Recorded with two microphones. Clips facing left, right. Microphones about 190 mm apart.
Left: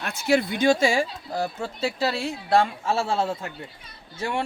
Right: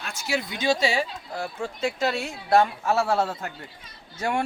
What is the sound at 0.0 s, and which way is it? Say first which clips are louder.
A man's voice: left 7 dB; 60° left (ahead or behind).